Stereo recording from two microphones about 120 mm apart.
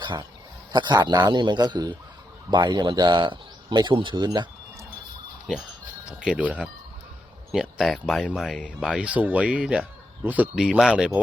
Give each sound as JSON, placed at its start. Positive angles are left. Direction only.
{"t": 0.0, "sound": "a man's voice", "side_deg": -40}
{"t": 6.1, "sound": "speech", "side_deg": -5}